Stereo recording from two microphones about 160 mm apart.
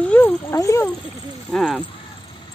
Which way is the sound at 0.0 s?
10° left (ahead or behind).